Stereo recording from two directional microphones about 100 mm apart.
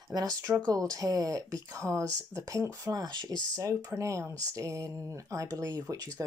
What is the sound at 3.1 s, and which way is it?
Speech, 50° right (ahead or behind).